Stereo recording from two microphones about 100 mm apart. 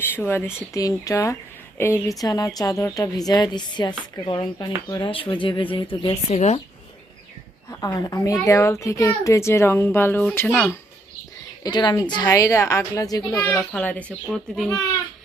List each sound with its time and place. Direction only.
0.0 s speech: 20° left (ahead or behind)
0.7 s a woman's voice: 35° left (ahead or behind); by 6.6 s 75° left (ahead or behind)
7.7 s speech: 35° left (ahead or behind); by 10.7 s 15° left (ahead or behind)
11.6 s speech: 45° left (ahead or behind)
12.3 s a woman's voice: 35° left (ahead or behind)
13.6 s a child's voice: 10° left (ahead or behind)